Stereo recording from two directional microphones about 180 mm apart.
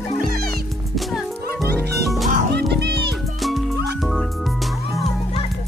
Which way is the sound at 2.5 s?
70° right (ahead or behind).